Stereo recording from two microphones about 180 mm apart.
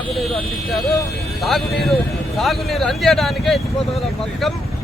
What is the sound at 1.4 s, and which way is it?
Speech, centre (ahead or behind).